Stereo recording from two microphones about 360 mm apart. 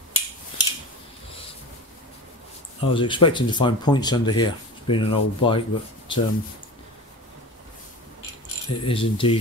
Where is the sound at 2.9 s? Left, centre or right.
Centre.